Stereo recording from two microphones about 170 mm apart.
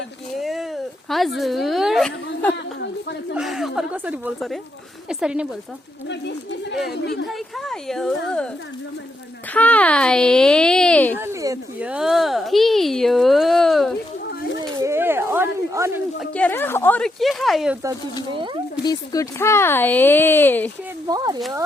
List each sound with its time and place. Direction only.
0.3 s a sound: centre (ahead or behind)
1.4 s speech: centre (ahead or behind)
6.1 s speech: 90° left
7.3 s speech: centre (ahead or behind)
9.5 s speech: 10° left (ahead or behind)
11.2 s speech: 15° right (ahead or behind)
11.8 s speech: 5° right (ahead or behind)
14.8 s a sound: 15° right (ahead or behind)
16.3 s speech: 10° left (ahead or behind)
18.3 s speech: 25° right (ahead or behind)
18.8 s speech: 20° left (ahead or behind)
21.1 s speech: 20° right (ahead or behind)